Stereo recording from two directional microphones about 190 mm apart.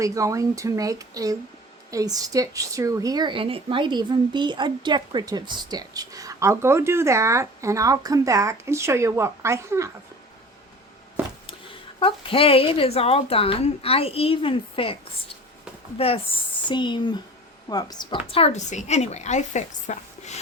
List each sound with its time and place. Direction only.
0.0 s a woman's voice: 15° right (ahead or behind)
11.9 s speech: 30° left (ahead or behind)
16.0 s speech: 30° left (ahead or behind)